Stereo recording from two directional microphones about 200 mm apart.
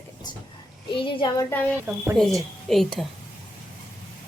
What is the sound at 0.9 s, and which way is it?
Speech, 25° left (ahead or behind).